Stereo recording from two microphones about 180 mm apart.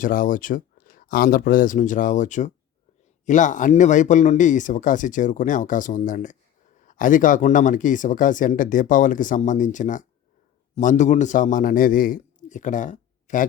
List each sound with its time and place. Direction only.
0.0 s a man's voice: 50° left (ahead or behind)